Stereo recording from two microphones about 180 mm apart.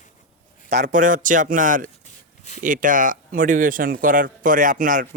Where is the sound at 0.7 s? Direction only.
45° right (ahead or behind).